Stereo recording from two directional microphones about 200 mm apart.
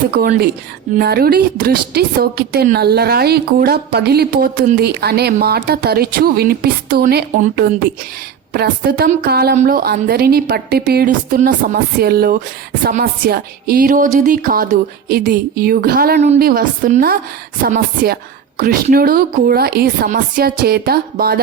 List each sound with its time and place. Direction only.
0.2 s a woman's voice: 50° right (ahead or behind)